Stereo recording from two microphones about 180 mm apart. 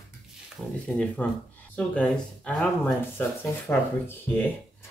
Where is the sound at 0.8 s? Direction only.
5° left (ahead or behind).